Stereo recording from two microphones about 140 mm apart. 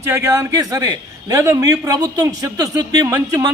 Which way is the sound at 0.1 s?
20° right (ahead or behind).